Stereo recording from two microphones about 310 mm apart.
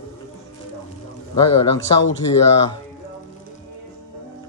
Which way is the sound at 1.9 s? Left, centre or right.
Centre.